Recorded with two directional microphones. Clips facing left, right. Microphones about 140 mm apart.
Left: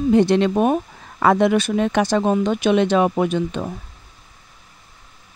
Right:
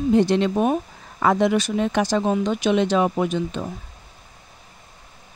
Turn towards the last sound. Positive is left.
turn(degrees=60)  # may be behind; listen again after turning